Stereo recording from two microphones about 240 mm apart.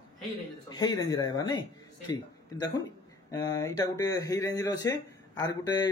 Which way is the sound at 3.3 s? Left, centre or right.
Centre.